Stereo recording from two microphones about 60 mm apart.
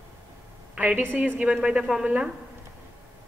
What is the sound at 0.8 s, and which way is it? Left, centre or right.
Speech, right.